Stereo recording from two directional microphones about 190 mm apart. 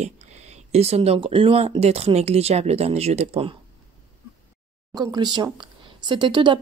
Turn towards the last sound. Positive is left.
turn(degrees=-25)  # may be behind; listen again after turning